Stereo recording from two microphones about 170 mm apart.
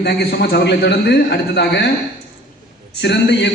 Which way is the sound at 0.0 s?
75° left (ahead or behind).